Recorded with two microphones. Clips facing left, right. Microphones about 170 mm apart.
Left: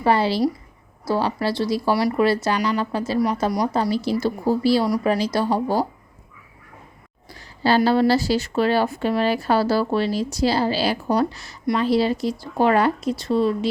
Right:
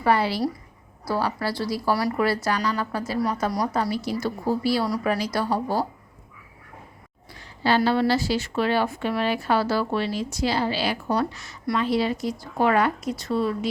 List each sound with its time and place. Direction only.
0.0 s speech: 30° left (ahead or behind)
7.3 s a sound: 35° left (ahead or behind)
7.9 s a woman's voice: 35° left (ahead or behind)